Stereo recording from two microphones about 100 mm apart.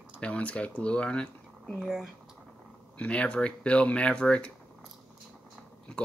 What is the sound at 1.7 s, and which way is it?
Speech, 5° right (ahead or behind).